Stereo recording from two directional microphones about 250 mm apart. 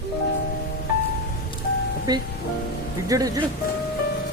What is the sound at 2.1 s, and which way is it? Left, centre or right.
Speech, centre.